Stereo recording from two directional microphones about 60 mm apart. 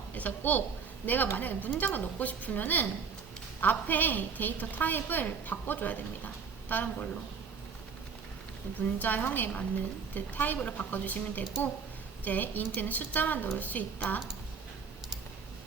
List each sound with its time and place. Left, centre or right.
0.1 s a woman's voice: left
8.8 s a woman's voice: left